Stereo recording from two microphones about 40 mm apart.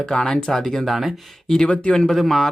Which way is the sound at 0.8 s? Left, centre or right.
Centre.